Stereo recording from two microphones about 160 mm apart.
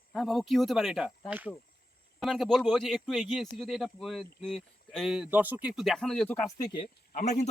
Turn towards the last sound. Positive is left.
turn(degrees=45)  # may be behind; listen again after turning